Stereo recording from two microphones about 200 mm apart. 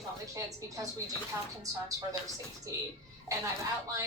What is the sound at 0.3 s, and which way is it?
Speech, 15° right (ahead or behind).